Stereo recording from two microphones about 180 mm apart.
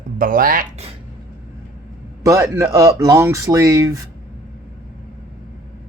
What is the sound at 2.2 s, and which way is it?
A man's voice, 20° right (ahead or behind).